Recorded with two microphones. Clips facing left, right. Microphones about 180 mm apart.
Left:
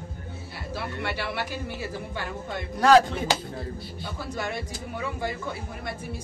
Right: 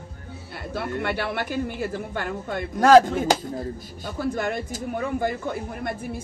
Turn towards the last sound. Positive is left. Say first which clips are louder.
# right 5 dB
turn(degrees=-50)  # may be behind; listen again after turning